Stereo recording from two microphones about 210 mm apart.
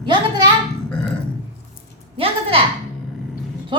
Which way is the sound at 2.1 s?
25° right (ahead or behind).